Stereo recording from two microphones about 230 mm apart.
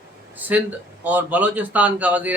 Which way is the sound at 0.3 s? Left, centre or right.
Centre.